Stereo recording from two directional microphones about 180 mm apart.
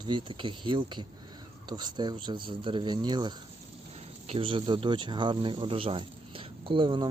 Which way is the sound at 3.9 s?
35° right (ahead or behind).